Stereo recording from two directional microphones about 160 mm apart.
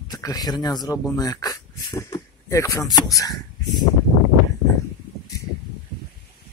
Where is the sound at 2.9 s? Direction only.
20° left (ahead or behind).